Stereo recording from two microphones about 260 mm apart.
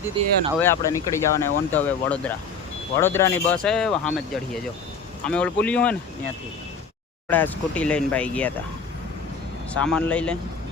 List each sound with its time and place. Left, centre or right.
0.2 s speech: right
0.6 s speech: centre
5.2 s speech: centre
7.3 s speech: centre
9.7 s speech: centre